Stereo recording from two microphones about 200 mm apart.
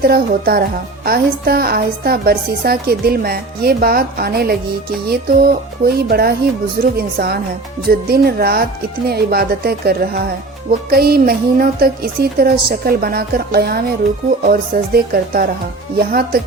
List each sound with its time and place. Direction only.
0.0 s speech: 50° right (ahead or behind)
14.9 s speech: 50° right (ahead or behind)